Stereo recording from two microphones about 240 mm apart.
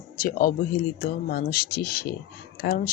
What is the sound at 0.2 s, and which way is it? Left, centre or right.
Speech, left.